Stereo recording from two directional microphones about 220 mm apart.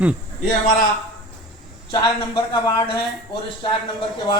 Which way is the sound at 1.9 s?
20° left (ahead or behind).